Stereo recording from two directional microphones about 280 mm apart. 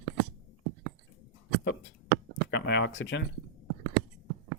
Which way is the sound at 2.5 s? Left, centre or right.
Left.